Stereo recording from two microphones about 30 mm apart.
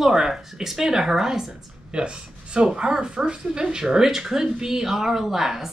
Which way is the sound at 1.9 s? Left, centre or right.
Right.